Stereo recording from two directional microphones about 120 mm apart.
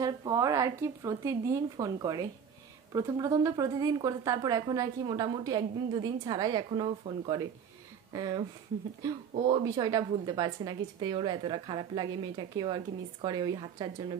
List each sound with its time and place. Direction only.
0.0 s a woman's voice: 30° right (ahead or behind)
9.5 s a woman's voice: 35° right (ahead or behind)